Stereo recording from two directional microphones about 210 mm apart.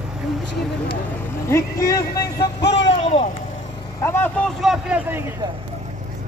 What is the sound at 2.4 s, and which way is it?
Music, 55° left (ahead or behind).